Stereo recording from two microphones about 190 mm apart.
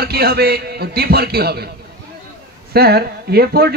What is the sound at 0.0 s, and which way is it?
Speech, 55° right (ahead or behind).